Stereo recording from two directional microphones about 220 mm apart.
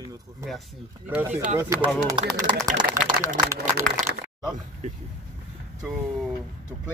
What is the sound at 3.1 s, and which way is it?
Speech, 40° right (ahead or behind).